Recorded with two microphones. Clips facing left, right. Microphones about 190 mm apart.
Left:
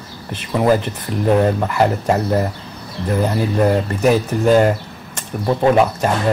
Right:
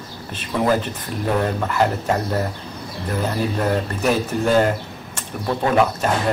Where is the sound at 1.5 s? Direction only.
10° left (ahead or behind).